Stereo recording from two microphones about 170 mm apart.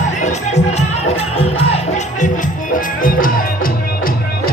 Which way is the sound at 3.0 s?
55° left (ahead or behind).